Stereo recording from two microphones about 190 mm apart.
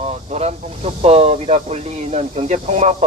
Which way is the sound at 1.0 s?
35° right (ahead or behind).